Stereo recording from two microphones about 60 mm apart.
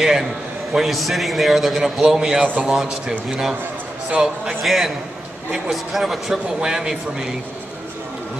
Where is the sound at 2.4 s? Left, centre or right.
Right.